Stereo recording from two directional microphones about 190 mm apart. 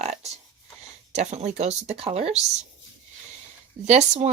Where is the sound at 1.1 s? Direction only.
40° right (ahead or behind).